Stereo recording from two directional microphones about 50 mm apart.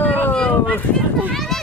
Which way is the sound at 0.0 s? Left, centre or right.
Left.